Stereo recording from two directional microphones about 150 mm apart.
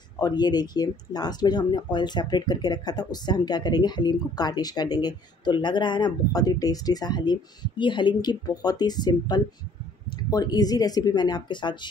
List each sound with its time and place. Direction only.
0.2 s speech: 25° left (ahead or behind)